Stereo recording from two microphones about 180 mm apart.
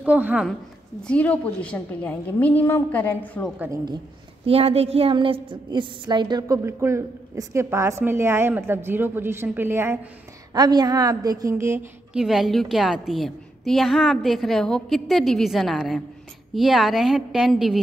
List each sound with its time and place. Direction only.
0.0 s a woman's voice: 10° right (ahead or behind)
1.0 s a woman's voice: 5° left (ahead or behind)
3.4 s a woman's voice: 10° right (ahead or behind)
3.7 s a woman's voice: 25° right (ahead or behind)
4.5 s a woman's voice: 35° right (ahead or behind); by 9.9 s 10° right (ahead or behind)
10.5 s a woman's voice: 25° right (ahead or behind); by 17.7 s centre (ahead or behind)